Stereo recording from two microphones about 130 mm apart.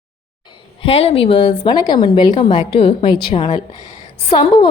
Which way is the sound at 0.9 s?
50° left (ahead or behind).